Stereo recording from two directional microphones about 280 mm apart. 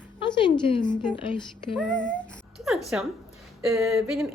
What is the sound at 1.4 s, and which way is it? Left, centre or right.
A woman's voice, centre.